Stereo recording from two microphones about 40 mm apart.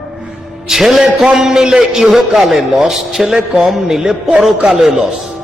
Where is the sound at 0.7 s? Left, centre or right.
Centre; by 4.9 s right.